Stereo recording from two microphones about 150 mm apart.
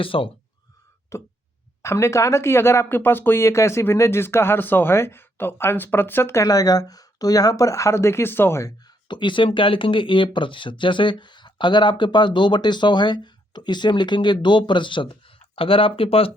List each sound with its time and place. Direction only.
0.0 s speech: 35° left (ahead or behind)
1.1 s speech: 20° left (ahead or behind); by 16.3 s 40° left (ahead or behind)